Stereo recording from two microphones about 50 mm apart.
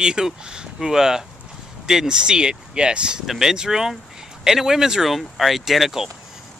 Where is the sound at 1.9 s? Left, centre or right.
Centre.